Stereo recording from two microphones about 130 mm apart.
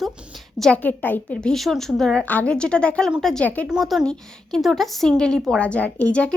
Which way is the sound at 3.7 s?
Centre (ahead or behind).